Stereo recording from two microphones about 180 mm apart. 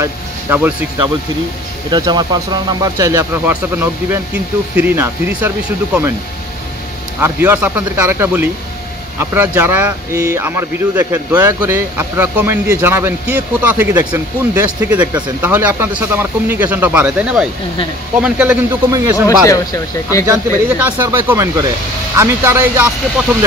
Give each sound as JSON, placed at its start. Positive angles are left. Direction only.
{"t": 0.0, "sound": "speech", "side_deg": -10}
{"t": 1.9, "sound": "speech", "side_deg": -25}
{"t": 7.2, "sound": "speech", "side_deg": -10}
{"t": 19.2, "sound": "speech", "side_deg": 20}
{"t": 20.2, "sound": "speech", "side_deg": -10}